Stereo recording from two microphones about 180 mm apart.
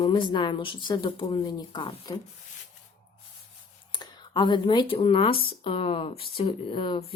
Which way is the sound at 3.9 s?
25° left (ahead or behind).